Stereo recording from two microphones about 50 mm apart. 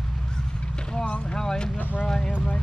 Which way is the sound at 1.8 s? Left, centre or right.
Left.